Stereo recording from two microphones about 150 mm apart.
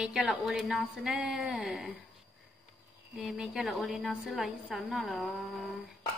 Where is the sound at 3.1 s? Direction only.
5° right (ahead or behind).